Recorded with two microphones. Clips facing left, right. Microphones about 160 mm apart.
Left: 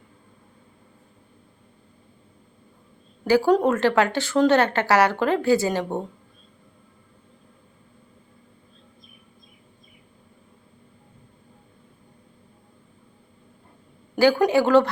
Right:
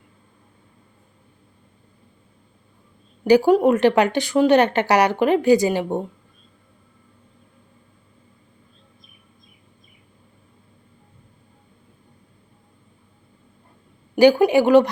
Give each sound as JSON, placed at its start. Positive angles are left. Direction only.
{"t": 3.2, "sound": "a woman's voice", "side_deg": -15}
{"t": 14.2, "sound": "a woman's voice", "side_deg": -15}